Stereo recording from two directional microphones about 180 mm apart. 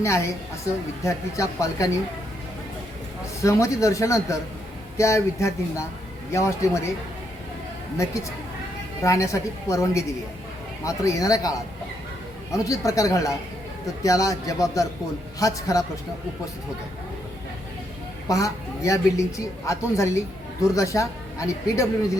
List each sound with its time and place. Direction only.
0.0 s a man's voice: 15° left (ahead or behind)
3.4 s a man's voice: 15° left (ahead or behind)
9.0 s a man's voice: 15° left (ahead or behind)
18.3 s a man's voice: 20° left (ahead or behind)